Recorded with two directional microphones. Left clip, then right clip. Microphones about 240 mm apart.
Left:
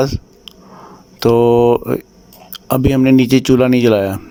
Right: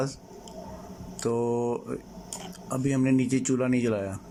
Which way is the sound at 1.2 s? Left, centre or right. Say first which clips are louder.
Left 17 dB; left.